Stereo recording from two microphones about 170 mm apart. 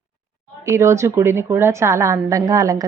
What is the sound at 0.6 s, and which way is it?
A woman's voice, 15° right (ahead or behind).